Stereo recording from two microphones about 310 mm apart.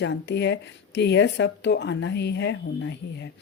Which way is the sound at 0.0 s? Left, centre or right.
Left.